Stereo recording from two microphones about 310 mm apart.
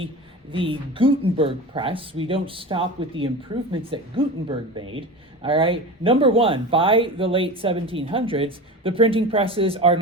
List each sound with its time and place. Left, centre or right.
0.5 s speech: centre